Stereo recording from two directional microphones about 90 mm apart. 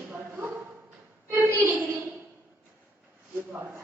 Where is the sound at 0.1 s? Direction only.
20° right (ahead or behind).